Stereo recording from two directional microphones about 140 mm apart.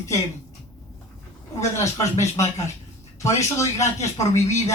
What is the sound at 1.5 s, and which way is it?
Speech, 20° left (ahead or behind).